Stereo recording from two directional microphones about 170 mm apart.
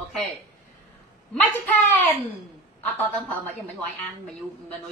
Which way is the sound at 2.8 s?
10° left (ahead or behind).